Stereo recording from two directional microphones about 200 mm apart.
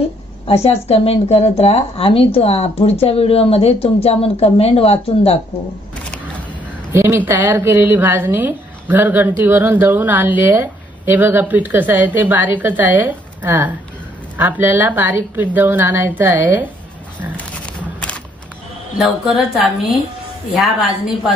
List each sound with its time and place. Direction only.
0.5 s a woman's voice: 30° left (ahead or behind)
6.9 s a woman's voice: 10° right (ahead or behind)
18.9 s a woman's voice: centre (ahead or behind)